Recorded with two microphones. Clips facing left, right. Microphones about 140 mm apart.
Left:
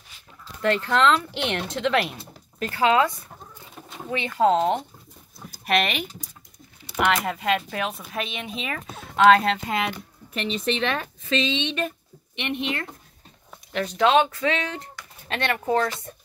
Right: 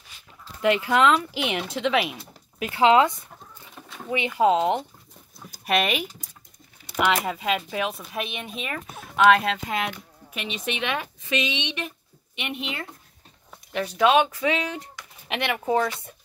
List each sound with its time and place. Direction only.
0.6 s speech: 10° right (ahead or behind)
2.6 s speech: 20° right (ahead or behind)
7.1 s speech: 5° right (ahead or behind)